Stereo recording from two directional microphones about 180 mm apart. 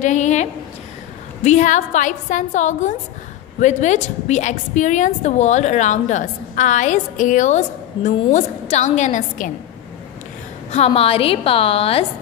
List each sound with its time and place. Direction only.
0.0 s a woman's voice: 40° left (ahead or behind)
10.7 s a woman's voice: 35° left (ahead or behind)